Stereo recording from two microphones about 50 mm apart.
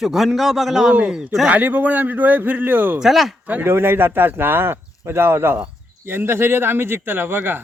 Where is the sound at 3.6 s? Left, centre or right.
Right.